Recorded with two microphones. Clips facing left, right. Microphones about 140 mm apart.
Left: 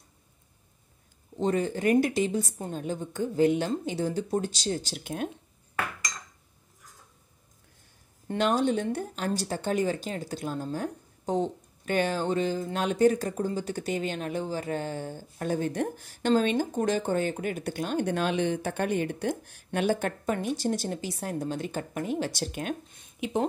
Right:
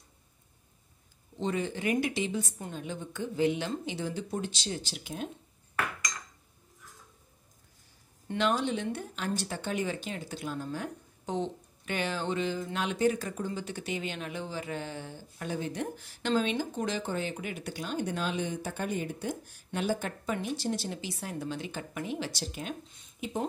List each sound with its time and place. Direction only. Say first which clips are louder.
1.3 s speech: left 5 dB; 45° left (ahead or behind)
8.3 s speech: left 4 dB; 40° left (ahead or behind); by 22.8 s 55° left (ahead or behind)